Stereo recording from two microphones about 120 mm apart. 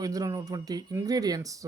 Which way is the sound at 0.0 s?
30° right (ahead or behind).